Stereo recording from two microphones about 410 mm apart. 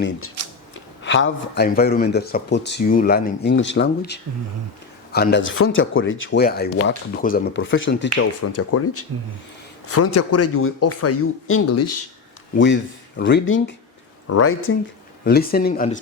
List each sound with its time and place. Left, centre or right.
1.0 s speech: left
12.5 s speech: left
15.2 s speech: left